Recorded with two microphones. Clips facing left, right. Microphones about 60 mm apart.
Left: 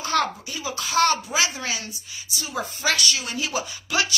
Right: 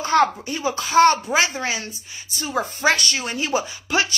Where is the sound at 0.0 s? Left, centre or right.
Right.